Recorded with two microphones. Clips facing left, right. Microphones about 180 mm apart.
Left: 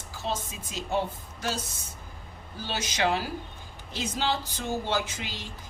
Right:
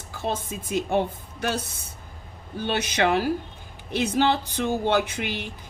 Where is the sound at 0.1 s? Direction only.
55° right (ahead or behind).